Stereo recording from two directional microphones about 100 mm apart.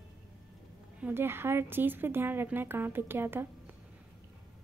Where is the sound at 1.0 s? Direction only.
25° right (ahead or behind).